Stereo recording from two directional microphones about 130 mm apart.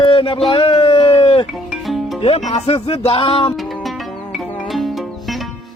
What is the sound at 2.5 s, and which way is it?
Music, 55° left (ahead or behind).